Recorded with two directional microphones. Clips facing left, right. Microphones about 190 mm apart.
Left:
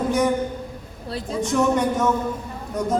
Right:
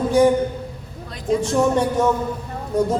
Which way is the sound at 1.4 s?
30° right (ahead or behind).